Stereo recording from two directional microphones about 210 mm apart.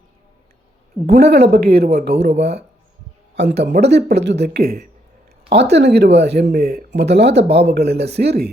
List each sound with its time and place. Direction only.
1.0 s speech: 50° right (ahead or behind)
3.3 s speech: 55° right (ahead or behind)